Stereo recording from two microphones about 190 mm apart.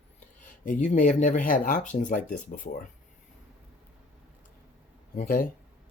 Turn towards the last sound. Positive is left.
turn(degrees=50)  # may be behind; listen again after turning